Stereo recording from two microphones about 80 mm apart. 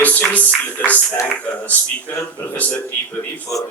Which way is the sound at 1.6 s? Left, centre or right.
Left.